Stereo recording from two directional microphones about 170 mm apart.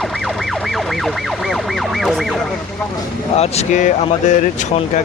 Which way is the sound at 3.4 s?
45° left (ahead or behind).